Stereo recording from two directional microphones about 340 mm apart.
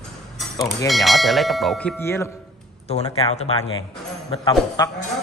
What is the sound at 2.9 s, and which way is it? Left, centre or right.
Speech, centre.